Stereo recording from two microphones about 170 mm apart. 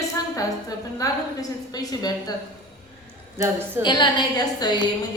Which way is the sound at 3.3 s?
15° right (ahead or behind).